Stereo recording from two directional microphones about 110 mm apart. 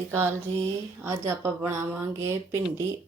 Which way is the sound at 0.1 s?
20° right (ahead or behind).